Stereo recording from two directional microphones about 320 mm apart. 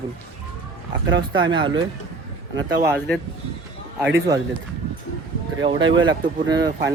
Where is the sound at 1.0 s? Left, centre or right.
Right.